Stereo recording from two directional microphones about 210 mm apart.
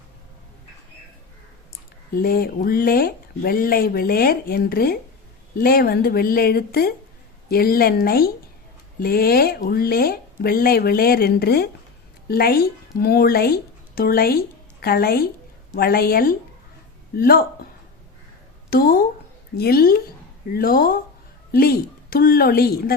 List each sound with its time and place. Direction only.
2.2 s speech: 45° left (ahead or behind)
18.7 s speech: 45° left (ahead or behind)